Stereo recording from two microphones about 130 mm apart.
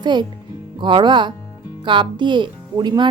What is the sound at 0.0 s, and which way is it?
A woman's voice, 35° right (ahead or behind).